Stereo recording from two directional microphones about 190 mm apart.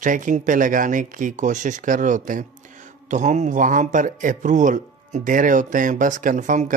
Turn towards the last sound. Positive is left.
turn(degrees=-40)  # may be behind; listen again after turning